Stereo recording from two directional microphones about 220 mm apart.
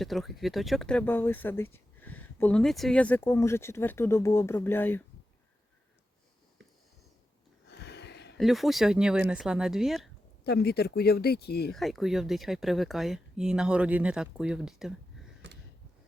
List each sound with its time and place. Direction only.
0.0 s speech: centre (ahead or behind)
7.7 s a sound: 50° left (ahead or behind)
8.4 s speech: centre (ahead or behind)
10.4 s speech: 45° left (ahead or behind)
11.7 s speech: centre (ahead or behind)